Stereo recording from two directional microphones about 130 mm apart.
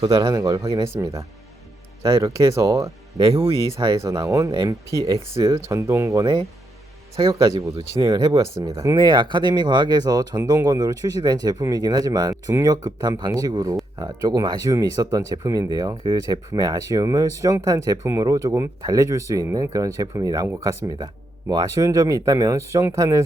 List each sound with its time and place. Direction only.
0.0 s speech: 35° right (ahead or behind)
8.3 s speech: 25° right (ahead or behind)